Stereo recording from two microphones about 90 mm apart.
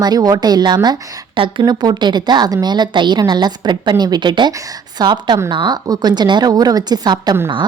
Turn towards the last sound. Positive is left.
turn(degrees=-50)  # may be behind; listen again after turning